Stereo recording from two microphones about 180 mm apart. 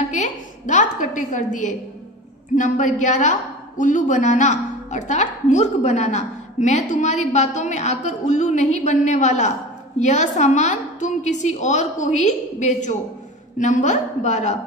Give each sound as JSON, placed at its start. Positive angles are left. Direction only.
{"t": 0.1, "sound": "a woman's voice", "side_deg": 40}